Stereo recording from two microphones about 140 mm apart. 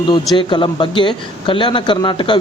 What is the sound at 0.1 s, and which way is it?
Speech, 35° left (ahead or behind).